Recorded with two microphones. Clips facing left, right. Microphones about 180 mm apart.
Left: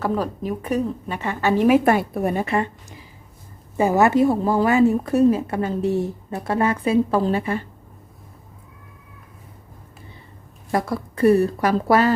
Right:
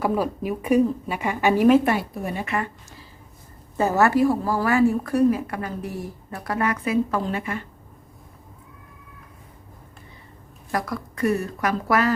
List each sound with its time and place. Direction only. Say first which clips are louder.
0.0 s a woman's voice: even; 10° right (ahead or behind)
1.8 s a woman's voice: left 5 dB; 50° left (ahead or behind)
2.4 s a woman's voice: left 5 dB; 30° left (ahead or behind)
3.8 s a woman's voice: left 2 dB; 15° left (ahead or behind); by 7.6 s 35° left (ahead or behind)
10.7 s a woman's voice: left 4 dB; 25° left (ahead or behind)